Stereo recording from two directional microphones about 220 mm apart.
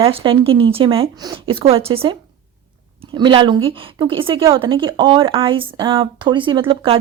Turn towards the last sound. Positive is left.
turn(degrees=-25)  # may be behind; listen again after turning